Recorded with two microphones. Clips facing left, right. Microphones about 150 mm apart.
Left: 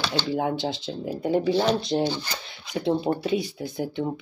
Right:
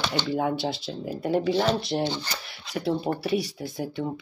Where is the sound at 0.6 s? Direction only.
20° left (ahead or behind).